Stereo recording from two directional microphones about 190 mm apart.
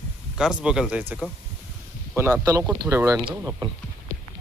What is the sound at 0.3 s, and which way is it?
Speech, 5° right (ahead or behind).